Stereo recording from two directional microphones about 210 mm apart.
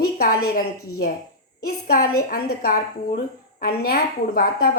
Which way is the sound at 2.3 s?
45° left (ahead or behind).